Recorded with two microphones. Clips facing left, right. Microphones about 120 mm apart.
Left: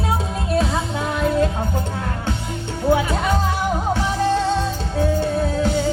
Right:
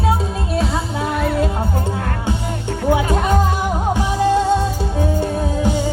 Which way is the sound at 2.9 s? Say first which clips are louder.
Right 1 dB; 15° right (ahead or behind).